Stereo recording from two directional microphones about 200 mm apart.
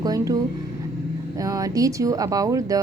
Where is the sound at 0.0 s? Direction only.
15° right (ahead or behind).